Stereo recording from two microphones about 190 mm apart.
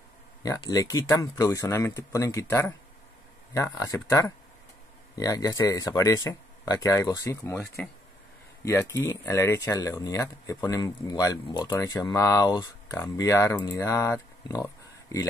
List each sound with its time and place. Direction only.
0.4 s speech: 20° left (ahead or behind)